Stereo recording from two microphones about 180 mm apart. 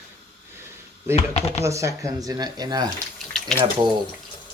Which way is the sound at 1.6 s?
15° right (ahead or behind).